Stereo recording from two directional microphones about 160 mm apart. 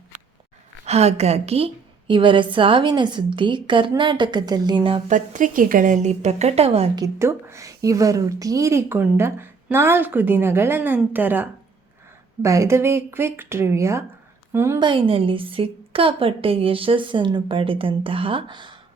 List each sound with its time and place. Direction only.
0.9 s a woman's voice: 40° right (ahead or behind)
5.0 s a woman's voice: 50° right (ahead or behind)
6.9 s a woman's voice: 20° right (ahead or behind)
14.8 s a woman's voice: 30° right (ahead or behind)